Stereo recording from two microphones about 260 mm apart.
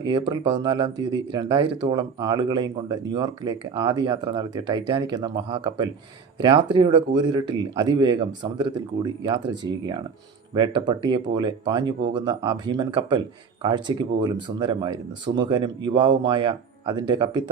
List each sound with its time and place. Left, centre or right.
0.0 s speech: centre